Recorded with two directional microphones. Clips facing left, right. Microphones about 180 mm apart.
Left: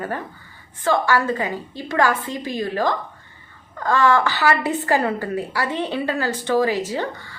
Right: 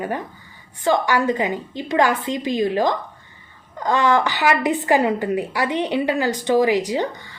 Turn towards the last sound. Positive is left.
turn(degrees=-20)  # may be behind; listen again after turning